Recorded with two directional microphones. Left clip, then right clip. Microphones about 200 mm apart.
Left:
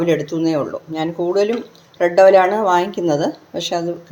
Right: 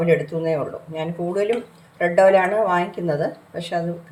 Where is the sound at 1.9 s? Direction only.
35° left (ahead or behind).